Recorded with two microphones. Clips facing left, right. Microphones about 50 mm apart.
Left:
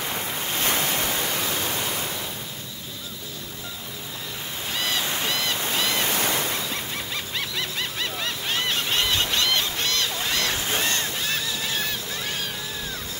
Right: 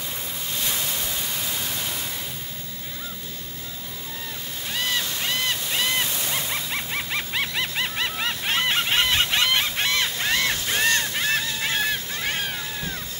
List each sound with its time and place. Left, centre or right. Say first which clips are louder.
0.1 s waves: left 4 dB; left
5.0 s honk: left 2 dB; left
5.6 s waves: even; left
6.7 s music: right 3 dB; right
10.8 s honk: right 4 dB; right
11.8 s a sound: right 4 dB; right